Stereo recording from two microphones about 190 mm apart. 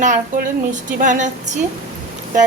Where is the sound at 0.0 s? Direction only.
45° right (ahead or behind).